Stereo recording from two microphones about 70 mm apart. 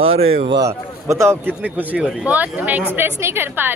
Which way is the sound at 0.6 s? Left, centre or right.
Right.